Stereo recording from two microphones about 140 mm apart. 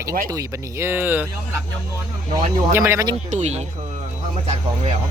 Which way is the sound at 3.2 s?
55° right (ahead or behind).